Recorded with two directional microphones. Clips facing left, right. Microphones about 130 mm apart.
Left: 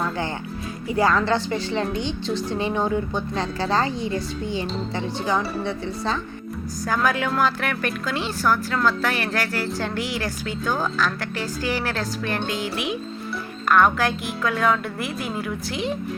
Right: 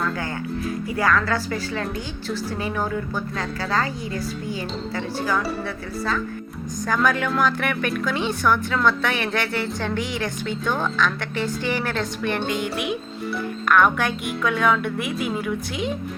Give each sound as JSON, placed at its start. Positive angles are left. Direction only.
{"t": 0.9, "sound": "a woman's voice", "side_deg": 25}
{"t": 6.8, "sound": "a woman's voice", "side_deg": 5}
{"t": 12.5, "sound": "music", "side_deg": -55}
{"t": 13.7, "sound": "a woman's voice", "side_deg": 0}